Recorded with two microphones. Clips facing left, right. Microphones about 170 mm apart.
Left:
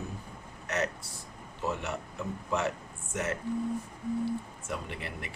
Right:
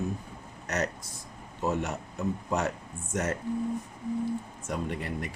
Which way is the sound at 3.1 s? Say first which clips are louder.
Right 3 dB; 40° right (ahead or behind).